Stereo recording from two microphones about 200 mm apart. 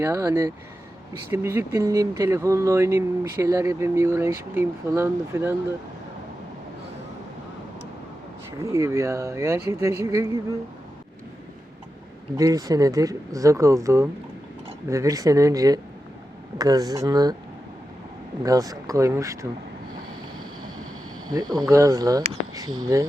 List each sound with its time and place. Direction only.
0.0 s speech: 15° right (ahead or behind)
8.6 s speech: 15° right (ahead or behind)
12.4 s speech: 15° right (ahead or behind)
18.4 s speech: 15° right (ahead or behind)
21.3 s speech: 20° right (ahead or behind)